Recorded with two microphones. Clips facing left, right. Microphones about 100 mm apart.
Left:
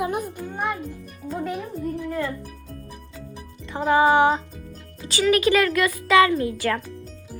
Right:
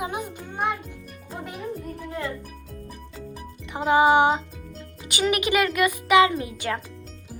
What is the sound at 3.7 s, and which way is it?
Speech, 20° right (ahead or behind).